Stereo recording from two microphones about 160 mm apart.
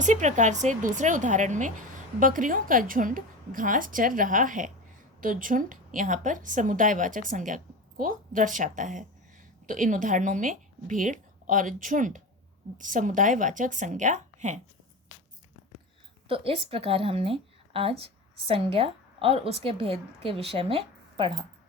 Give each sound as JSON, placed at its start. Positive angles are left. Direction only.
{"t": 0.0, "sound": "a woman's voice", "side_deg": -50}
{"t": 16.3, "sound": "speech", "side_deg": -35}